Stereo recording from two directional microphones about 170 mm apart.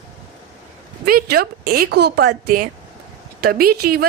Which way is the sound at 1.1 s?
60° right (ahead or behind).